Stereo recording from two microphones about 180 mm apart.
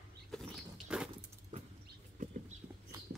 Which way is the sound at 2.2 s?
45° right (ahead or behind).